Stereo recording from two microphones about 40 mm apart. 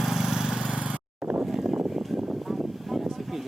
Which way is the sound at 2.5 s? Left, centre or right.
Centre.